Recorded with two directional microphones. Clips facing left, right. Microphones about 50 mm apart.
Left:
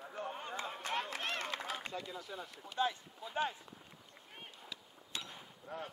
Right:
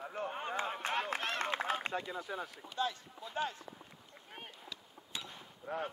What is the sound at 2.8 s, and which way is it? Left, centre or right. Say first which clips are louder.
Speech: left 1 dB; centre.